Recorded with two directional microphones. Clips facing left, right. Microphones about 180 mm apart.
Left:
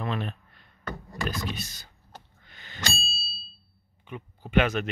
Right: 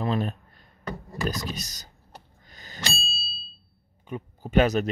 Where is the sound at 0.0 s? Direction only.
35° right (ahead or behind).